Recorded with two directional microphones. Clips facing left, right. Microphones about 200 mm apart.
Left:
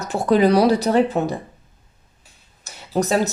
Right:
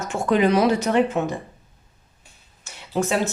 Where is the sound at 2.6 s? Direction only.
40° left (ahead or behind).